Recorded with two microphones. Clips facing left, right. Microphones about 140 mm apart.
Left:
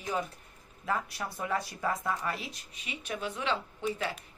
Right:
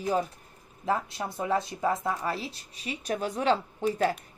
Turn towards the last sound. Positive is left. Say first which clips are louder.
# right 6 dB
turn(degrees=-40)  # may be behind; listen again after turning